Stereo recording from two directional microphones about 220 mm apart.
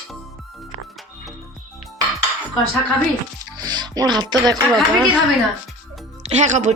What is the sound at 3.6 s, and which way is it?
Speech, 20° right (ahead or behind).